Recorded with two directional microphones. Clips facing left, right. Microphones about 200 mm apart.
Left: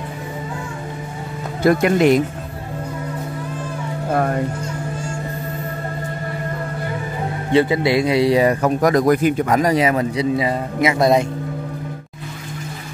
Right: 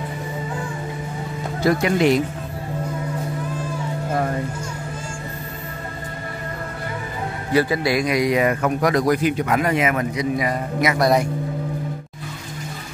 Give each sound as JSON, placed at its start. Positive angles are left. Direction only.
{"t": 1.6, "sound": "speech", "side_deg": 55}
{"t": 7.5, "sound": "a man's voice", "side_deg": 25}